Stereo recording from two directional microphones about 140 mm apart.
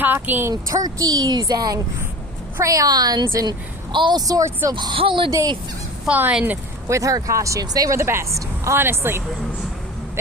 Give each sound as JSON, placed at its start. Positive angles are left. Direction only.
{"t": 0.0, "sound": "speech", "side_deg": -15}
{"t": 0.5, "sound": "speech", "side_deg": -30}
{"t": 4.7, "sound": "speech", "side_deg": -35}
{"t": 5.3, "sound": "speech", "side_deg": -25}
{"t": 6.1, "sound": "speech", "side_deg": -10}